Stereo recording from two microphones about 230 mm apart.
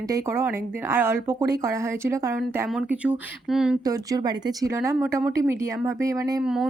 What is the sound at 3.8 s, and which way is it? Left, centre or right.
Speech, centre.